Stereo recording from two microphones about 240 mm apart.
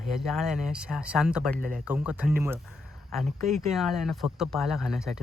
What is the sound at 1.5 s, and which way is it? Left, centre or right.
Speech, right.